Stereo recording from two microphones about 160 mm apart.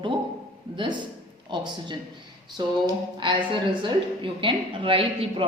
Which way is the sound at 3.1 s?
30° right (ahead or behind).